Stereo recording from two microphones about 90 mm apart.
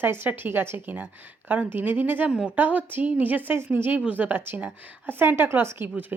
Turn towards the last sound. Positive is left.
turn(degrees=-25)  # may be behind; listen again after turning